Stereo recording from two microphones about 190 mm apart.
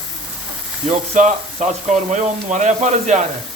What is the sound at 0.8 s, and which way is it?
Speech, 40° right (ahead or behind).